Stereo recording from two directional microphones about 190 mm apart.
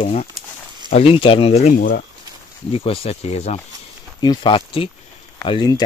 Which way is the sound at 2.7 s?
30° left (ahead or behind).